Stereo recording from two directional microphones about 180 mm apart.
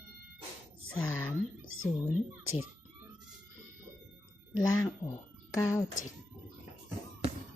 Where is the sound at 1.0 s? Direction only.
10° left (ahead or behind).